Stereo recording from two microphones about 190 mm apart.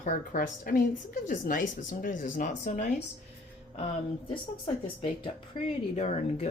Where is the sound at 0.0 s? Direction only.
45° left (ahead or behind).